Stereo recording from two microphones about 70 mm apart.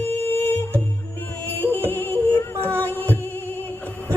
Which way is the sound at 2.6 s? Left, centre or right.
Right.